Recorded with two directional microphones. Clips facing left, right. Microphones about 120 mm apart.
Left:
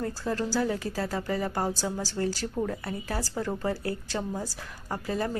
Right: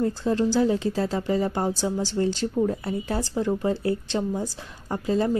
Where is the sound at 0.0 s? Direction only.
20° right (ahead or behind).